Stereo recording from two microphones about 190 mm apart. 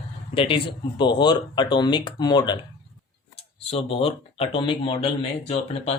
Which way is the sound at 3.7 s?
30° left (ahead or behind).